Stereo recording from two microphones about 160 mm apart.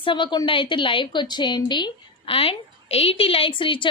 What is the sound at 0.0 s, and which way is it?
A woman's voice, 30° left (ahead or behind).